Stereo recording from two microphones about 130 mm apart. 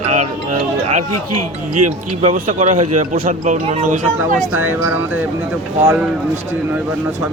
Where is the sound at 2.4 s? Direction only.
75° right (ahead or behind).